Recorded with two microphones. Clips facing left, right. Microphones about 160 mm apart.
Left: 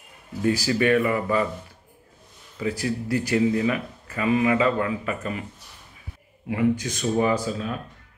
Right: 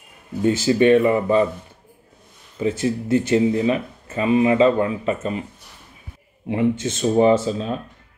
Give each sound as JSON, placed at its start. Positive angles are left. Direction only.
{"t": 0.4, "sound": "speech", "side_deg": -25}
{"t": 2.6, "sound": "speech", "side_deg": -25}
{"t": 6.4, "sound": "speech", "side_deg": -25}